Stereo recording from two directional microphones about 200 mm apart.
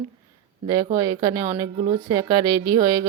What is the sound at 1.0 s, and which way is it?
Speech, 20° right (ahead or behind).